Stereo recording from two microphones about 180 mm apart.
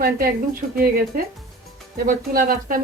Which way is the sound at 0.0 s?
55° right (ahead or behind).